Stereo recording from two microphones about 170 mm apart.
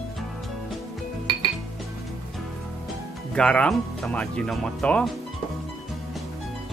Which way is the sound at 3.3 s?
5° left (ahead or behind).